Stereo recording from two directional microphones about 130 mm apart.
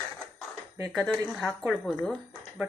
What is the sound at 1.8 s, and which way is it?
Speech, 5° left (ahead or behind).